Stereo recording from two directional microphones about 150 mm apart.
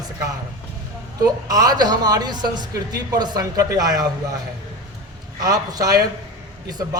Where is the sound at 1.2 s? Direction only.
25° right (ahead or behind).